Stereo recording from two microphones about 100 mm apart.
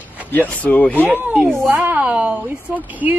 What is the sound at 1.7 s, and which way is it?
A woman's voice, 20° right (ahead or behind).